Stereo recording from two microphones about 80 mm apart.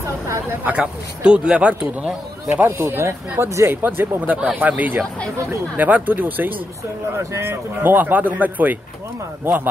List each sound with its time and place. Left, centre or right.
0.7 s a man's voice: centre
2.5 s speech: right